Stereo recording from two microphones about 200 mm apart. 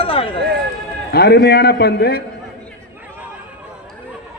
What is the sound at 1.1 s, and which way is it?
A man's voice, 50° left (ahead or behind).